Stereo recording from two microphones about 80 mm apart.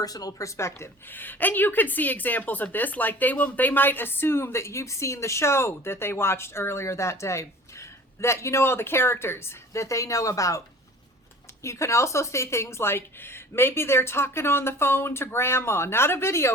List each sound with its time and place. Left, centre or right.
0.0 s a woman's voice: left
1.1 s a woman's voice: left
11.6 s a woman's voice: left